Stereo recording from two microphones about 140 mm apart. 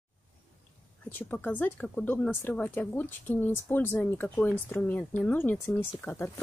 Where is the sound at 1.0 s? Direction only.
15° left (ahead or behind).